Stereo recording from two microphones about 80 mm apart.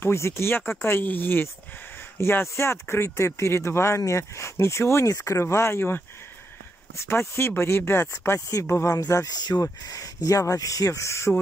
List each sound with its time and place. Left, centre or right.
0.0 s speech: left
8.9 s speech: left